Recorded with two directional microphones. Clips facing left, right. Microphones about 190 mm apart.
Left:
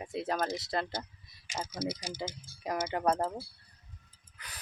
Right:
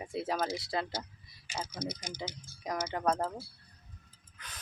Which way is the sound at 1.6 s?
20° left (ahead or behind).